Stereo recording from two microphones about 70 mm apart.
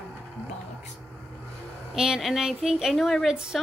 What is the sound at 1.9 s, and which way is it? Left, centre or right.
Speech, centre.